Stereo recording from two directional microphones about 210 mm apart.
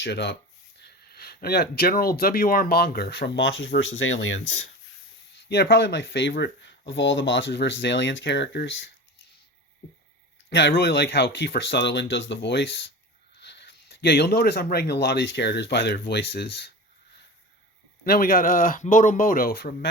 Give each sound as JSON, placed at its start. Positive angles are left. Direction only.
{"t": 0.0, "sound": "speech", "side_deg": 55}
{"t": 5.4, "sound": "speech", "side_deg": 50}
{"t": 10.5, "sound": "speech", "side_deg": 50}
{"t": 18.0, "sound": "speech", "side_deg": 45}